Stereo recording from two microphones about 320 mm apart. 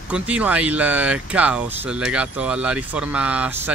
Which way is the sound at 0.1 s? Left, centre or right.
Centre.